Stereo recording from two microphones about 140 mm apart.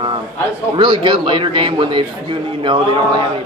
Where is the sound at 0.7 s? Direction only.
35° right (ahead or behind).